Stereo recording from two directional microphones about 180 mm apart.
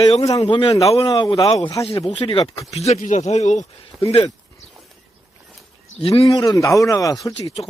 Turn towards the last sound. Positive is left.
turn(degrees=20)  # may be behind; listen again after turning